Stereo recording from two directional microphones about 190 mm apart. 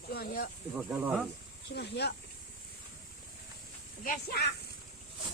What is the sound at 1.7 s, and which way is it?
Speech, 60° left (ahead or behind).